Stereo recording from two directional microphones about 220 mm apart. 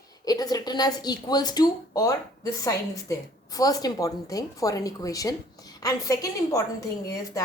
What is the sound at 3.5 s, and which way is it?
Speech, 15° left (ahead or behind).